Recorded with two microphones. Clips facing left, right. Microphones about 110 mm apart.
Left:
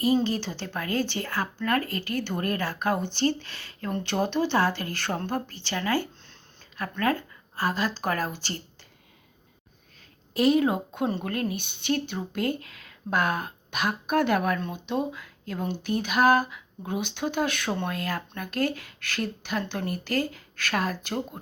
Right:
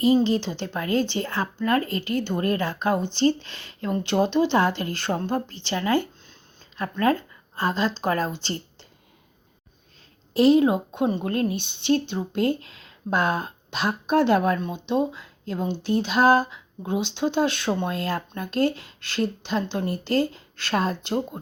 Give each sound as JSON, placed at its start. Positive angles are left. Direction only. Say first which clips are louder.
{"t": 0.0, "sound": "a woman's voice", "louder": "right 4 dB", "side_deg": -20}
{"t": 10.3, "sound": "a woman's voice", "louder": "right 5 dB", "side_deg": -25}